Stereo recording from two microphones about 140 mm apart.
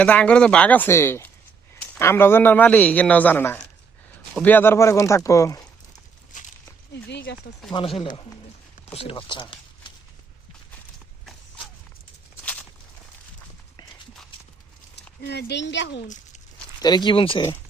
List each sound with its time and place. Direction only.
0.0 s a man's voice: 10° left (ahead or behind)
6.3 s a sound: 65° left (ahead or behind)
7.7 s speech: 40° left (ahead or behind)
16.8 s speech: 30° left (ahead or behind)